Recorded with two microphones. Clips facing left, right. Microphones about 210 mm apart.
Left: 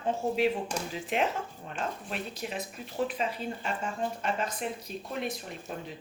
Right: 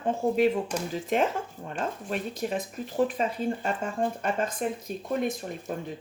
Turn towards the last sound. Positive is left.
turn(degrees=-45)  # may be behind; listen again after turning